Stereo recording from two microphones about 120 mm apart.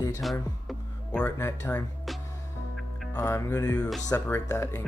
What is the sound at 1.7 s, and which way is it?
Speech, 15° left (ahead or behind).